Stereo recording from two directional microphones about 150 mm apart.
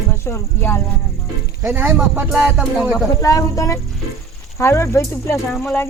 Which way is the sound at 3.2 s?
20° left (ahead or behind).